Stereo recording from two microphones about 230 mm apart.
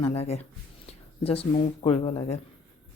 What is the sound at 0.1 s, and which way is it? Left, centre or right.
Speech, left.